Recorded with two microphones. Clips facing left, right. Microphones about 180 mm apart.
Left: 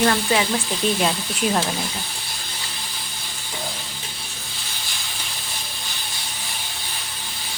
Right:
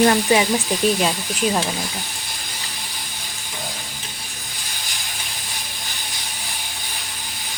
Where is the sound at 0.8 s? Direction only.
5° right (ahead or behind).